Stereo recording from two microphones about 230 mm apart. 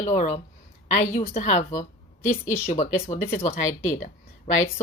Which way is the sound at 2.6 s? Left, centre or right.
Left.